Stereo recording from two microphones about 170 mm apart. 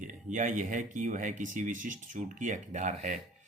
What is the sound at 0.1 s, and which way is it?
Speech, 45° right (ahead or behind).